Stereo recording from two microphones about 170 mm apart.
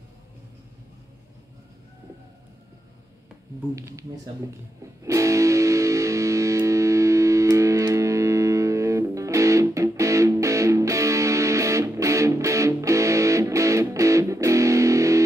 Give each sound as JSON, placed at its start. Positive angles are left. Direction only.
{"t": 3.7, "sound": "speech", "side_deg": -20}
{"t": 5.0, "sound": "music", "side_deg": -20}